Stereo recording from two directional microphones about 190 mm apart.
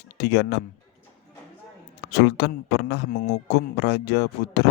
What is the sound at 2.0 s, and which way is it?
Speech, 60° left (ahead or behind).